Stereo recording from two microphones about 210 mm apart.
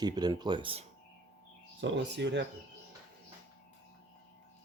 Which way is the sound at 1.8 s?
60° right (ahead or behind).